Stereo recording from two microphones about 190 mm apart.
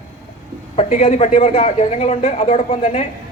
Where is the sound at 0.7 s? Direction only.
35° left (ahead or behind).